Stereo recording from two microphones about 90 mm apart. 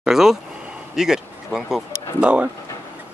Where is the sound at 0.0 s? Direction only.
5° right (ahead or behind).